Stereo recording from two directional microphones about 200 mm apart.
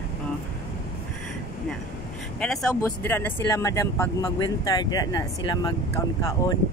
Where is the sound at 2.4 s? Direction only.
5° left (ahead or behind).